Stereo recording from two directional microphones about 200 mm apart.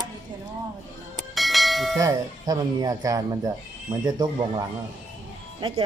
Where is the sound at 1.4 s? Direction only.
Centre (ahead or behind).